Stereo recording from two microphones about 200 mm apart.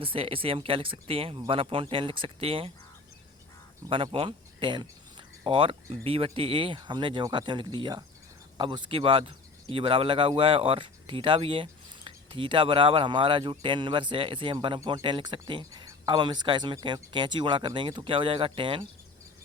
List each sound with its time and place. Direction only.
0.0 s speech: 25° right (ahead or behind)
3.8 s speech: 25° right (ahead or behind)